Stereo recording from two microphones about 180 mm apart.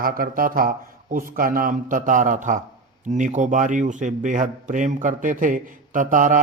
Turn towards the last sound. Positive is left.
turn(degrees=-45)  # may be behind; listen again after turning